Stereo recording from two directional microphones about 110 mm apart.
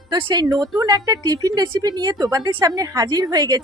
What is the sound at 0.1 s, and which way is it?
A woman's voice, 40° right (ahead or behind).